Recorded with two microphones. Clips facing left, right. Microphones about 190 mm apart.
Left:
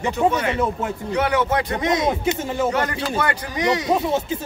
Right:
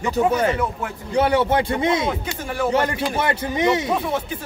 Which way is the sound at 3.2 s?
25° right (ahead or behind).